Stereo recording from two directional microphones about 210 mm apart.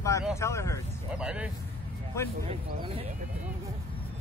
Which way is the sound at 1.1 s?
5° right (ahead or behind).